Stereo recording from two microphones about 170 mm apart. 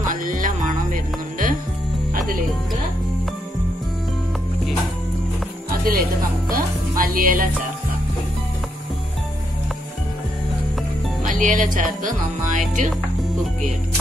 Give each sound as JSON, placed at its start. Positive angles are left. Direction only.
{"t": 0.0, "sound": "music", "side_deg": -50}
{"t": 5.9, "sound": "music", "side_deg": -60}
{"t": 11.2, "sound": "music", "side_deg": -50}